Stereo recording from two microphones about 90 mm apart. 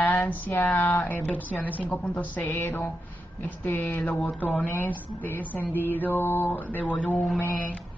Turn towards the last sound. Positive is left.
turn(degrees=20)  # may be behind; listen again after turning